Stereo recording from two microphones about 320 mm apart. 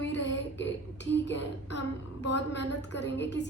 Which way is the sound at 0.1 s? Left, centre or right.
Left.